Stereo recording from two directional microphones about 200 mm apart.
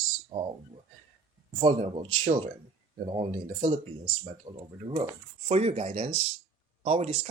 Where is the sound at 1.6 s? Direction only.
25° right (ahead or behind).